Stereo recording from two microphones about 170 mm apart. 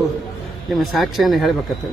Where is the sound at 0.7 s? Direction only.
Centre (ahead or behind).